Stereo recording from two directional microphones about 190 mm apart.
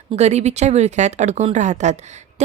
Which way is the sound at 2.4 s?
35° right (ahead or behind).